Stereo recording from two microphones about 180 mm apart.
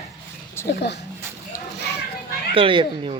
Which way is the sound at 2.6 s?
30° right (ahead or behind).